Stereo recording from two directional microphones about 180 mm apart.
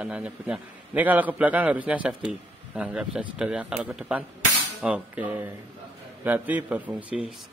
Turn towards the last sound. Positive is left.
turn(degrees=-5)  # may be behind; listen again after turning